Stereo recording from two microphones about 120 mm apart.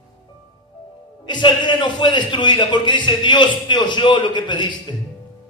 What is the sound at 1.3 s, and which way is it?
Speech, 40° left (ahead or behind).